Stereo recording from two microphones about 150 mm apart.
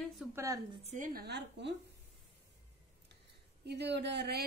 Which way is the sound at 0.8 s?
60° right (ahead or behind).